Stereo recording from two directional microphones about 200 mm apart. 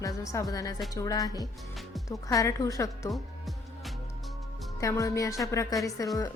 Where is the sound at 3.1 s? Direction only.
Centre (ahead or behind).